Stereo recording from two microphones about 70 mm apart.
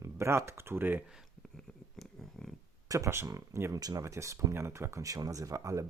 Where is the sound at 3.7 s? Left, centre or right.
Right.